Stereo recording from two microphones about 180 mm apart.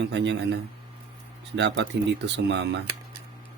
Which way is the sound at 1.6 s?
80° right.